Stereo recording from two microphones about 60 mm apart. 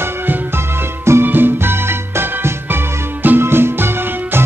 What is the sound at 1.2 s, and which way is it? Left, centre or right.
Music, right.